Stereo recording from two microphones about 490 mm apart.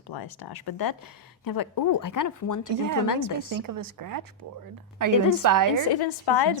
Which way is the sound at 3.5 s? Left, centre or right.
Right.